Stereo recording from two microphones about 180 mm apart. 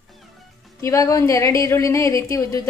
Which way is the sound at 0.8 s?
20° left (ahead or behind).